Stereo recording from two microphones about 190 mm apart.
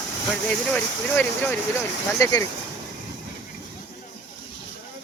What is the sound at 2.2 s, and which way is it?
Speech, 15° left (ahead or behind).